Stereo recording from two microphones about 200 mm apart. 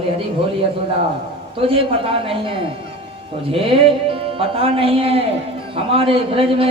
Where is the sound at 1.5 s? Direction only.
25° right (ahead or behind).